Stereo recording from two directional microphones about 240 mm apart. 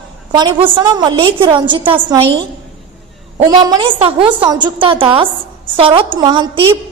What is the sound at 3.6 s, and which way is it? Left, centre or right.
A woman's voice, centre.